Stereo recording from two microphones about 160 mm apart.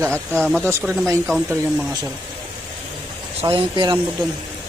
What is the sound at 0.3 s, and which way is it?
Speech, 5° left (ahead or behind).